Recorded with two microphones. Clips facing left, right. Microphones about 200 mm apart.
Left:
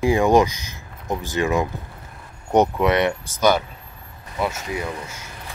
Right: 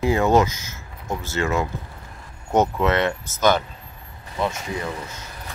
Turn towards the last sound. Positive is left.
turn(degrees=10)  # may be behind; listen again after turning